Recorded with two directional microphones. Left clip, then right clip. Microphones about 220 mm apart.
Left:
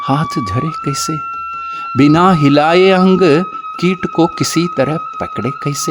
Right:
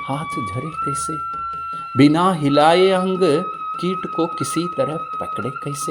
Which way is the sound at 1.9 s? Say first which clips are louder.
Left 5 dB; 30° left (ahead or behind).